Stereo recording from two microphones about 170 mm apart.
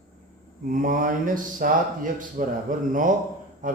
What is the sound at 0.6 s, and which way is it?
Speech, 55° right (ahead or behind).